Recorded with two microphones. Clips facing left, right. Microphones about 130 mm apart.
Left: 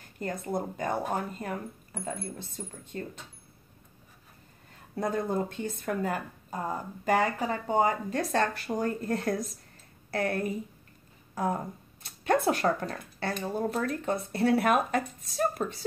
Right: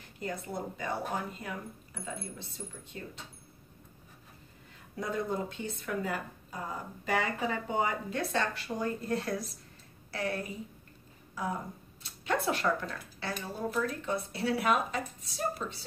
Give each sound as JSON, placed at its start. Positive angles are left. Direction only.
{"t": 0.2, "sound": "speech", "side_deg": 50}
{"t": 4.9, "sound": "speech", "side_deg": 45}